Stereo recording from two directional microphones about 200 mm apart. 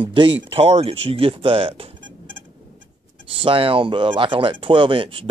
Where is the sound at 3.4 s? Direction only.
25° right (ahead or behind).